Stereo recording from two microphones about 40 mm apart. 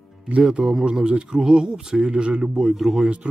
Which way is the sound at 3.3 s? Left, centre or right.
Right.